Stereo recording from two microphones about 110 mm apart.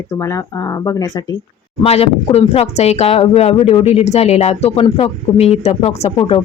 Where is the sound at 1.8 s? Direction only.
65° left (ahead or behind).